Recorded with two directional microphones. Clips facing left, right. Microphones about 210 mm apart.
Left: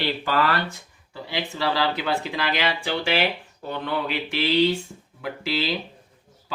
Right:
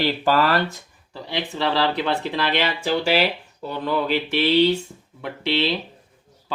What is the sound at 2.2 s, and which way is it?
Speech, 35° right (ahead or behind).